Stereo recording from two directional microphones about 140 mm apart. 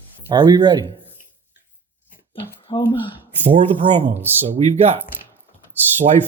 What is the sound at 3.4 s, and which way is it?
Speech, 45° right (ahead or behind).